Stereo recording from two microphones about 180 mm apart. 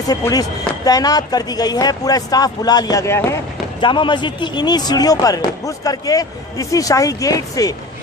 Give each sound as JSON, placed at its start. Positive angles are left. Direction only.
{"t": 0.1, "sound": "speech", "side_deg": 20}
{"t": 3.8, "sound": "speech", "side_deg": 25}